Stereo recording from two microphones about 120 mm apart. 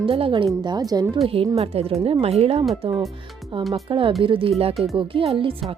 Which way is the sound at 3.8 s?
45° right (ahead or behind).